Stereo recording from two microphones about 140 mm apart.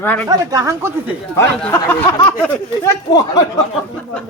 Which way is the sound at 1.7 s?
15° left (ahead or behind).